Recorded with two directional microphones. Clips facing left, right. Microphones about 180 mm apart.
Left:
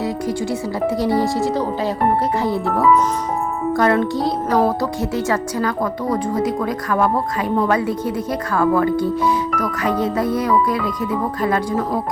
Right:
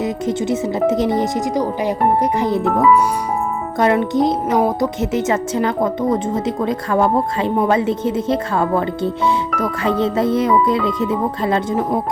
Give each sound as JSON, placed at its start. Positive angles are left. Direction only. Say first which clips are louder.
{"t": 0.0, "sound": "speech", "louder": "right 2 dB", "side_deg": -20}